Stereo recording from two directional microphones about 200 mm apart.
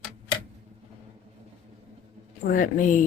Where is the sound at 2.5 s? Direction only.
40° left (ahead or behind).